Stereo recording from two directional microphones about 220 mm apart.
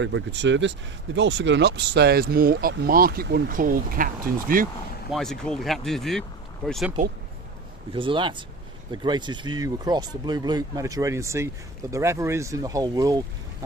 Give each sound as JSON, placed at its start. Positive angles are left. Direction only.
{"t": 0.0, "sound": "speech", "side_deg": -55}
{"t": 5.1, "sound": "speech", "side_deg": 0}
{"t": 7.9, "sound": "speech", "side_deg": -20}